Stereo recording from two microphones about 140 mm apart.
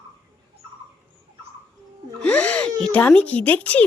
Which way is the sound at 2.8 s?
10° left (ahead or behind).